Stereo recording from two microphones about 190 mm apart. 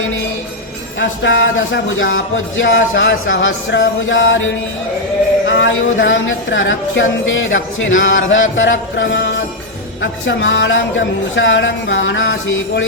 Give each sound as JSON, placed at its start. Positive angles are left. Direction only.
{"t": 0.9, "sound": "speech", "side_deg": 75}
{"t": 5.5, "sound": "speech", "side_deg": 80}